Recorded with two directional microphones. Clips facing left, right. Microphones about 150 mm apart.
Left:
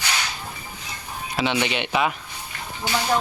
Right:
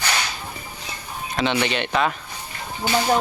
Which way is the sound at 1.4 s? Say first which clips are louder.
Right 1 dB; 10° left (ahead or behind).